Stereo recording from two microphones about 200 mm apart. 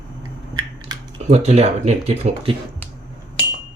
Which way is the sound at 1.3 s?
30° right (ahead or behind).